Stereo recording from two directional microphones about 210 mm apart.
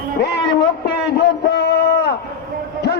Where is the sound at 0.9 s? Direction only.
55° left (ahead or behind).